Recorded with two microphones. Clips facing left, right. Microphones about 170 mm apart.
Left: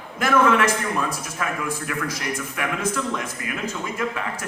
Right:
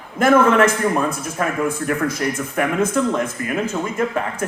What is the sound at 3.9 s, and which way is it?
Speech, 45° right (ahead or behind).